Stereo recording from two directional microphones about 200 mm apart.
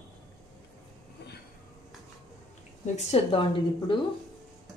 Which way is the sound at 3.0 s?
30° left (ahead or behind).